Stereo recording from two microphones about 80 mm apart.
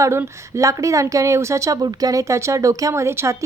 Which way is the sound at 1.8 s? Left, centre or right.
Right.